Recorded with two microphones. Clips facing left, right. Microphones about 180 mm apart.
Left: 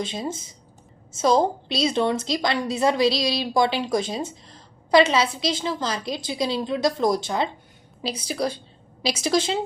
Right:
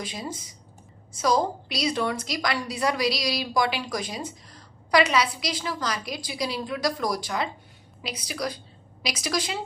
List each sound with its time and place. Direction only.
0.0 s a woman's voice: 25° left (ahead or behind)